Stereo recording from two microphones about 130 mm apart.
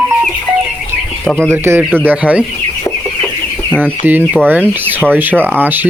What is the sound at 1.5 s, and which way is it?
Speech, 20° right (ahead or behind).